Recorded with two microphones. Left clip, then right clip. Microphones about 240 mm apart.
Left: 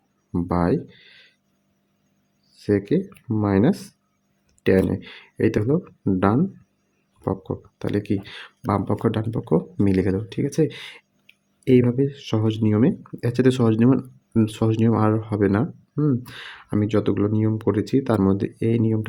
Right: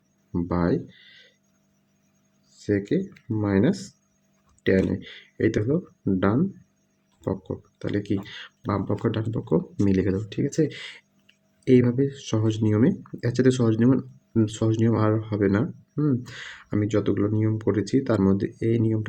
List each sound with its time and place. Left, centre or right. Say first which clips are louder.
0.3 s speech: left 3 dB; left
2.6 s speech: left 3 dB; centre